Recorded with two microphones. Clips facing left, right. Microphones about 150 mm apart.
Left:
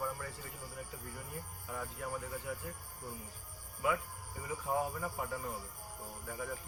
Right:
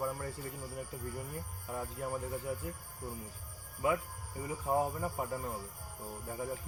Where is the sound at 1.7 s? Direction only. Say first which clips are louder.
Right 3 dB; 30° right (ahead or behind).